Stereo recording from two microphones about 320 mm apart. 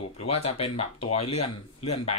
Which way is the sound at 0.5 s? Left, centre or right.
Centre.